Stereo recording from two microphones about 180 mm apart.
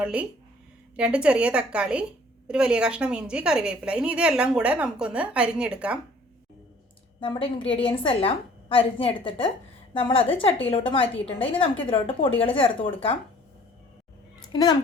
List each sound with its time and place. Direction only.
0.0 s a woman's voice: 5° right (ahead or behind)
7.2 s a woman's voice: 30° left (ahead or behind)
14.4 s a child's voice: 25° left (ahead or behind)